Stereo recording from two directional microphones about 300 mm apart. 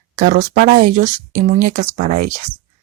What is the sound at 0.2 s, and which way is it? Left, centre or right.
Speech, right.